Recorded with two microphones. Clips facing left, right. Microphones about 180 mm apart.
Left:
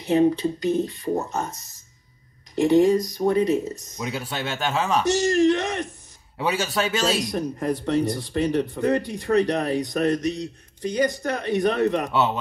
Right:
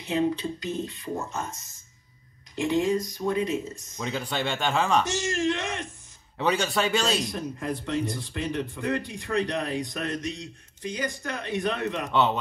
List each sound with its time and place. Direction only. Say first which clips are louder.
0.2 s speech: left 7 dB; 65° left (ahead or behind)
1.0 s speech: left 6 dB; 40° left (ahead or behind)
2.9 s speech: left 6 dB; 40° left (ahead or behind)
4.0 s speech: even; 5° left (ahead or behind)
5.2 s speech: left 8 dB; 40° left (ahead or behind)
6.3 s speech: left 1 dB; 5° left (ahead or behind)
7.2 s speech: left 6 dB; 40° left (ahead or behind)
12.1 s speech: left 1 dB; 5° left (ahead or behind)